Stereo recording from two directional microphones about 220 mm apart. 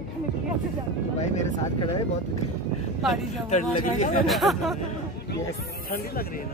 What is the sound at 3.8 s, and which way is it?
Speech, 35° left (ahead or behind).